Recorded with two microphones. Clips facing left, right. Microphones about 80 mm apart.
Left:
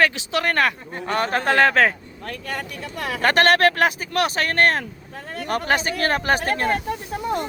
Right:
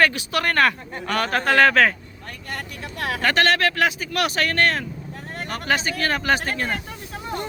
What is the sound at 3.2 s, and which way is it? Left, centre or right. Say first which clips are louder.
Speech: left 4 dB; left.